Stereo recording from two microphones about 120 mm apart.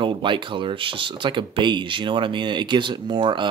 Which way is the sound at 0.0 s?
45° right (ahead or behind).